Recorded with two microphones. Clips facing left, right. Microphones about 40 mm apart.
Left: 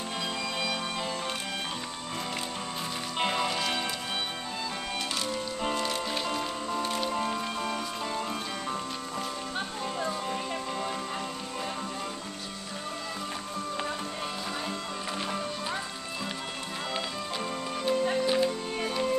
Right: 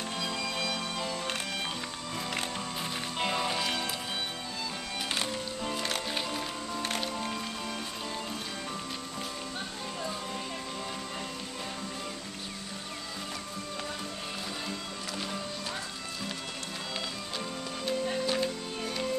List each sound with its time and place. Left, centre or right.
0.2 s music: centre
3.2 s music: centre
3.4 s music: centre
18.2 s music: centre